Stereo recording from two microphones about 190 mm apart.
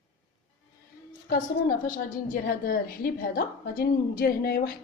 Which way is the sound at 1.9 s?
50° left (ahead or behind).